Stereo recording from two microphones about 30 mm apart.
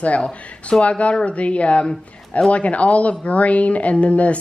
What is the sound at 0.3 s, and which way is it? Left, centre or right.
Speech, left.